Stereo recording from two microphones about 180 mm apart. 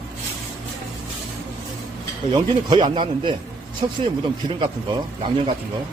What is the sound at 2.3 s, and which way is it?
A man's voice, 25° right (ahead or behind).